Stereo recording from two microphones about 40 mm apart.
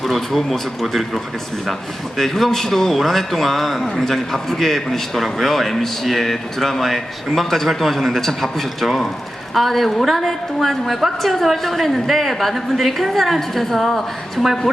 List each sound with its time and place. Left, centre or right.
0.0 s speech: centre